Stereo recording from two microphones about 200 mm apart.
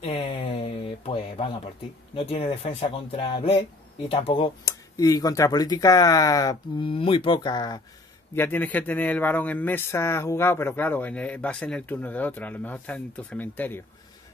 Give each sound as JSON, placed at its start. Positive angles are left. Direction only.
{"t": 0.0, "sound": "a sound", "side_deg": 30}
{"t": 2.1, "sound": "speech", "side_deg": 30}
{"t": 8.4, "sound": "speech", "side_deg": 10}